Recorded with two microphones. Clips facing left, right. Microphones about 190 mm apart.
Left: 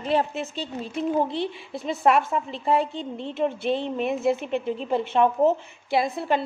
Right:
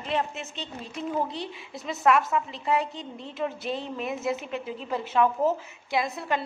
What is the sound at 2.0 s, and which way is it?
A woman's voice, 30° left (ahead or behind).